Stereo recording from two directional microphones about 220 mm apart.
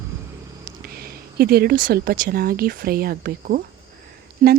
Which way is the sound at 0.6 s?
45° right (ahead or behind).